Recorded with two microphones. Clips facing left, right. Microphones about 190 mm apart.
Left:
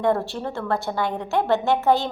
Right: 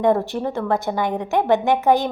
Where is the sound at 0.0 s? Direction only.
15° right (ahead or behind).